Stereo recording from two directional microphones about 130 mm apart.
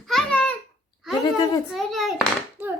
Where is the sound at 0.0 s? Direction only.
5° left (ahead or behind).